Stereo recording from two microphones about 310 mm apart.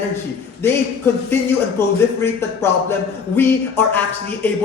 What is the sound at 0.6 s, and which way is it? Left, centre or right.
Speech, centre.